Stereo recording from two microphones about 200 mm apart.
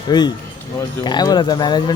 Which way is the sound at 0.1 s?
20° left (ahead or behind).